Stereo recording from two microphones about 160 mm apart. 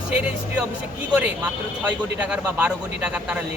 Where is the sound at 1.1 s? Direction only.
10° right (ahead or behind).